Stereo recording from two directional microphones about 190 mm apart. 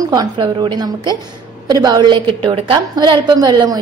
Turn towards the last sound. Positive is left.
turn(degrees=-20)  # may be behind; listen again after turning